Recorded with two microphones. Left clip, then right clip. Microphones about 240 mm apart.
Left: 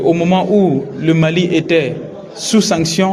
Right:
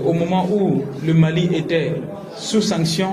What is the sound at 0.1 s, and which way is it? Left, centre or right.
A man's voice, left.